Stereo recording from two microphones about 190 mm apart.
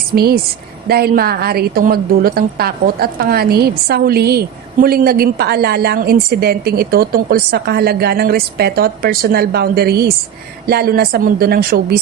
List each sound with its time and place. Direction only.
0.1 s a woman's voice: 50° right (ahead or behind)